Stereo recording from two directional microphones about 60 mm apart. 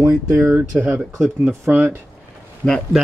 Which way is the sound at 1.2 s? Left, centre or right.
Centre.